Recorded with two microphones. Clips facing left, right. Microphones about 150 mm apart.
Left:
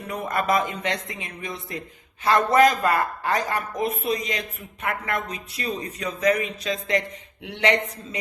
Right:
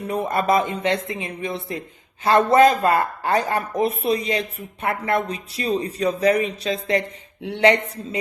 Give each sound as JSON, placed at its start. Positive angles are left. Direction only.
{"t": 0.1, "sound": "speech", "side_deg": -30}